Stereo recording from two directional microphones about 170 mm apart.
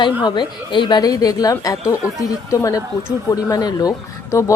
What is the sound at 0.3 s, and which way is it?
A woman's voice, 25° left (ahead or behind).